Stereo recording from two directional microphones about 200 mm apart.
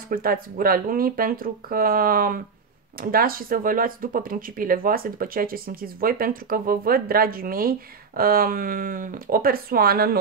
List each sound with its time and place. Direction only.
0.1 s speech: 45° right (ahead or behind)